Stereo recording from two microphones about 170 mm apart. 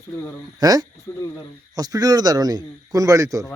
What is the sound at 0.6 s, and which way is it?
Speech, 20° right (ahead or behind).